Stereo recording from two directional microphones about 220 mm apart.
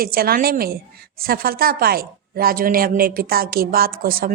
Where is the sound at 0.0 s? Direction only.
40° right (ahead or behind).